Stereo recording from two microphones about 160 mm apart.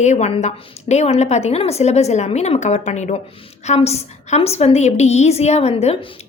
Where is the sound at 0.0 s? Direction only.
45° left (ahead or behind).